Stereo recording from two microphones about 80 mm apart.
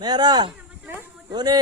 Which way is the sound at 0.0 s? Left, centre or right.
Right.